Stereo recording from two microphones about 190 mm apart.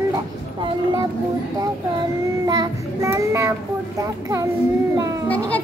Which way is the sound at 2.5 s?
20° right (ahead or behind).